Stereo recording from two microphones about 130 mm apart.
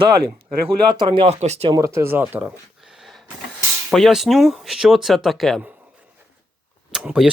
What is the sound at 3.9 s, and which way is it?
Speech, centre (ahead or behind).